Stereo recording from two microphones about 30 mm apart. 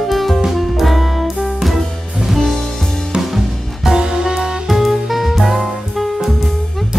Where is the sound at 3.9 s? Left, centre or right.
Right.